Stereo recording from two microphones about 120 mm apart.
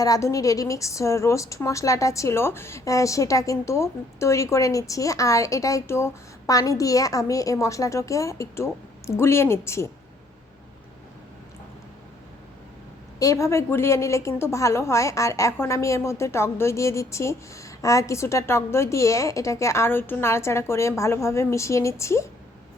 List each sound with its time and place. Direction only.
0.0 s a woman's voice: 30° left (ahead or behind)
13.1 s a woman's voice: 25° left (ahead or behind)